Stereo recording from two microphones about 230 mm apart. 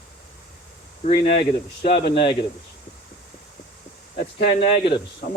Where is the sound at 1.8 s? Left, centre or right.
Left.